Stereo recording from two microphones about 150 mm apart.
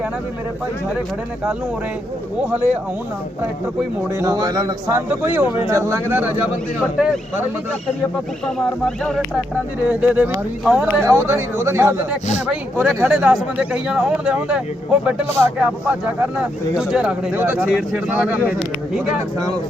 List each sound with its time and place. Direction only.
4.2 s speech: 25° right (ahead or behind)
9.8 s speech: 10° right (ahead or behind)
11.0 s speech: 15° right (ahead or behind)